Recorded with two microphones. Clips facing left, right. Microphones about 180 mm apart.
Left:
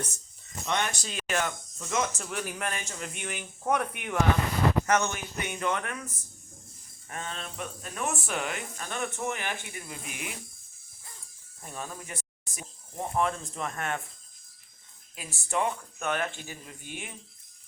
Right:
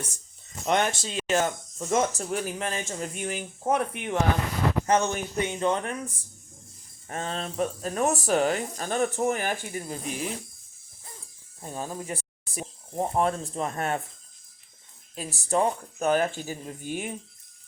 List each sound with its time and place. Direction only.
0.6 s speech: 45° right (ahead or behind)
0.9 s speech: 25° right (ahead or behind)
11.6 s speech: 30° right (ahead or behind)
15.1 s speech: 35° right (ahead or behind)